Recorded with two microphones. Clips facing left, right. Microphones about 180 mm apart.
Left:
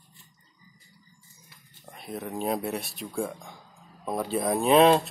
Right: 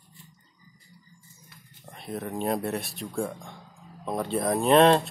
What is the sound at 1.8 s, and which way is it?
Speech, centre (ahead or behind).